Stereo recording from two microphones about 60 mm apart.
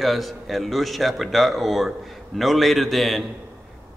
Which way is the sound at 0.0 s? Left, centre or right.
Centre.